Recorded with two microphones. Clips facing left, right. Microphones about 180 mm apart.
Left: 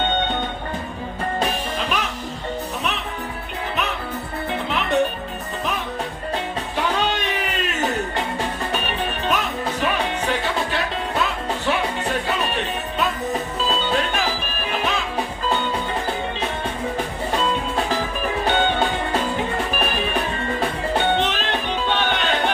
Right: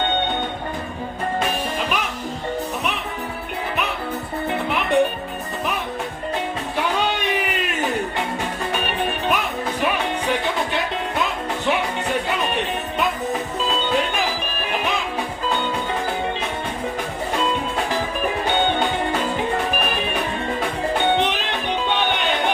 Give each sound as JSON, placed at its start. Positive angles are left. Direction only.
{"t": 4.5, "sound": "music", "side_deg": -10}
{"t": 6.7, "sound": "a sound", "side_deg": -10}
{"t": 8.7, "sound": "music", "side_deg": -15}
{"t": 21.0, "sound": "music", "side_deg": -15}